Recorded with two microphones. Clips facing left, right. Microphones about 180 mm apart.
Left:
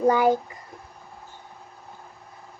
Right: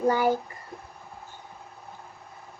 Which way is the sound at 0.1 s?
20° left (ahead or behind).